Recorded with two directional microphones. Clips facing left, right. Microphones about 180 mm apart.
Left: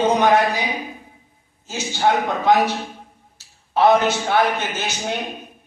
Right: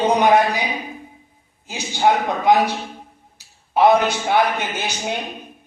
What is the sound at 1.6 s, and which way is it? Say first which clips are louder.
Speech: right 2 dB; 15° right (ahead or behind).